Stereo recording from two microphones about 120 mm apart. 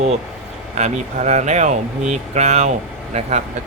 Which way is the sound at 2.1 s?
70° right (ahead or behind).